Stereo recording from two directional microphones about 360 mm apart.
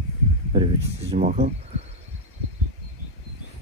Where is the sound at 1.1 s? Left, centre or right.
Right.